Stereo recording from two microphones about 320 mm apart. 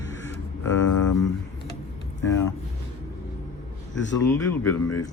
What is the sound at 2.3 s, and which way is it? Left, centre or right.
Speech, centre.